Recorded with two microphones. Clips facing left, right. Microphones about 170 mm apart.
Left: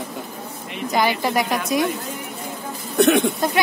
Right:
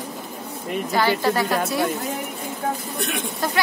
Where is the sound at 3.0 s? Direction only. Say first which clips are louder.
Left 12 dB; 75° left (ahead or behind).